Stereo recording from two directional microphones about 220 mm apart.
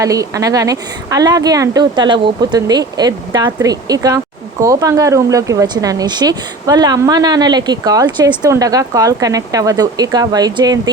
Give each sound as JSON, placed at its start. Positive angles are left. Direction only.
{"t": 0.0, "sound": "speech", "side_deg": -15}